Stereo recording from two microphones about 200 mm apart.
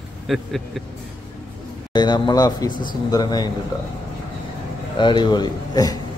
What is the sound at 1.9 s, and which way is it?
Speech, 20° left (ahead or behind).